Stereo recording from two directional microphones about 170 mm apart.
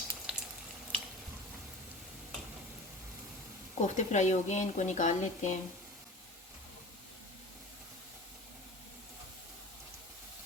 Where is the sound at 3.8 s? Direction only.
45° left (ahead or behind).